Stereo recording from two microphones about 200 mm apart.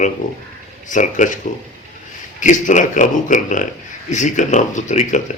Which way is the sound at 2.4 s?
40° left (ahead or behind).